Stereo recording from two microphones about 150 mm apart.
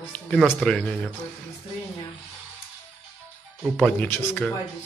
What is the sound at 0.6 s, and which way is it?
Speech, 5° left (ahead or behind).